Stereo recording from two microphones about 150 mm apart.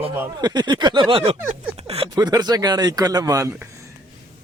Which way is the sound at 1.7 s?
40° right (ahead or behind).